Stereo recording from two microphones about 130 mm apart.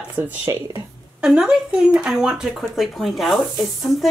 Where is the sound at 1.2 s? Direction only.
5° right (ahead or behind).